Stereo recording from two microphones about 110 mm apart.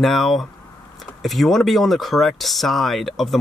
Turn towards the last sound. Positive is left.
turn(degrees=0)  # may be behind; listen again after turning